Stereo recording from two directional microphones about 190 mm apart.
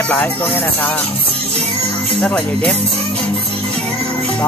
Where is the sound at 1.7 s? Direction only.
30° right (ahead or behind).